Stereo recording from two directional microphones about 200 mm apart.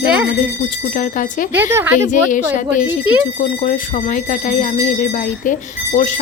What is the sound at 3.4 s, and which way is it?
Speech, 40° left (ahead or behind).